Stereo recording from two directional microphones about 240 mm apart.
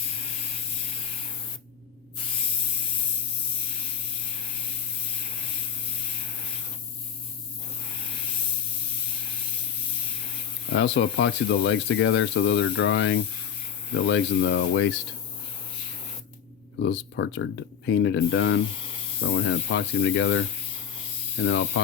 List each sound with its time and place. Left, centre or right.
10.7 s speech: left
16.9 s speech: left
21.4 s speech: left